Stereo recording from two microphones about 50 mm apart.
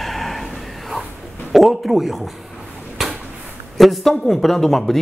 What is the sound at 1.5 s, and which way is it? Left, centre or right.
Speech, centre.